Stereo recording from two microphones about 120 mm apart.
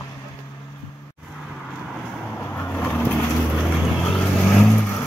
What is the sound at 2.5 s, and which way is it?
Vehicle, 15° left (ahead or behind).